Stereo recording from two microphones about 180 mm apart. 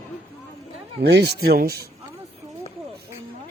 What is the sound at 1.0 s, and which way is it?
Speech, 65° right (ahead or behind).